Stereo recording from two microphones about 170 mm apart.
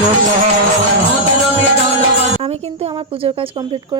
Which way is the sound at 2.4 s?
35° right (ahead or behind).